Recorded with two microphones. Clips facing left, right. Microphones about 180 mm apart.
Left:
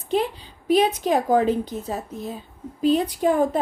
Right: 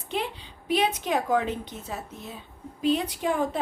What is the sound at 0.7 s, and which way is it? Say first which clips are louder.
A woman's voice: left 6 dB; 40° left (ahead or behind).